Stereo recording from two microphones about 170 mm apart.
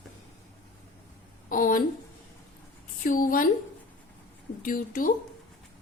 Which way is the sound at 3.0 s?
55° left (ahead or behind).